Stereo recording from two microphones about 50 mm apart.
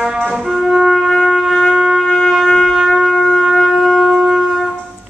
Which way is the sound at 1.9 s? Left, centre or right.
Centre.